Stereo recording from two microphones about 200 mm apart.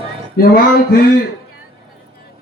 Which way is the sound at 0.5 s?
45° left (ahead or behind).